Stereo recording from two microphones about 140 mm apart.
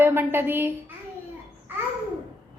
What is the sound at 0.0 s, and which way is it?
Laughter, 15° right (ahead or behind).